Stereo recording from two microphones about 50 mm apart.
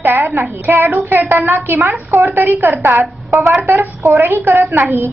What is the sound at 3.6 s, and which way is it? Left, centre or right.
Speech, right.